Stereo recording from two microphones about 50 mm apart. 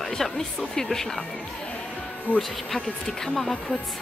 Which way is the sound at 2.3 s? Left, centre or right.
Right.